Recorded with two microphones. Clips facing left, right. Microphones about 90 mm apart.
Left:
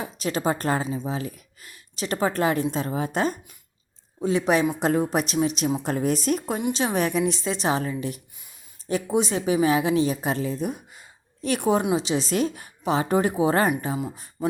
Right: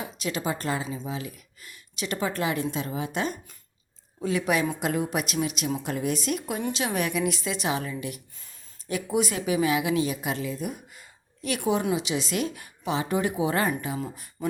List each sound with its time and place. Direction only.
0.0 s a woman's voice: 40° left (ahead or behind)
0.9 s speech: 25° left (ahead or behind)
1.1 s a woman's voice: 40° left (ahead or behind)
4.2 s a woman's voice: 30° left (ahead or behind)